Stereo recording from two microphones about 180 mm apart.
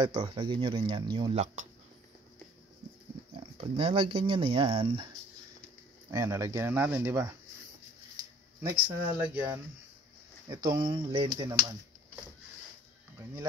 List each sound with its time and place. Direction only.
0.0 s speech: 25° right (ahead or behind)
1.3 s speech: 40° right (ahead or behind)
3.3 s speech: 30° right (ahead or behind)
6.1 s speech: 15° right (ahead or behind)
8.5 s speech: 20° right (ahead or behind)
9.3 s speech: 10° right (ahead or behind)